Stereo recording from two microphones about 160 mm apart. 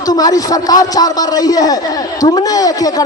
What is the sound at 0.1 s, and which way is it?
A man's voice, 25° left (ahead or behind).